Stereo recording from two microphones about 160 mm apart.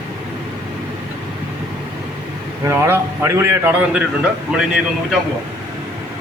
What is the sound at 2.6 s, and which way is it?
A man's voice, 15° right (ahead or behind).